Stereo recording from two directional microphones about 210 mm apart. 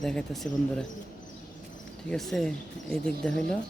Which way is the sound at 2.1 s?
Centre (ahead or behind).